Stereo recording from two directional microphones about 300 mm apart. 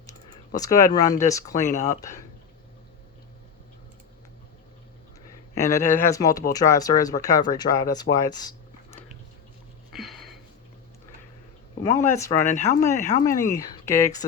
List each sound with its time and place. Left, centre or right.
0.1 s speech: centre
5.7 s speech: centre
9.9 s a sound: centre
11.8 s speech: centre
12.5 s speech: left
12.8 s speech: centre